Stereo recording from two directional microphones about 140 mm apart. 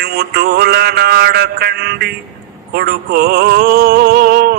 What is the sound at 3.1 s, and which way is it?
Music, 90° right.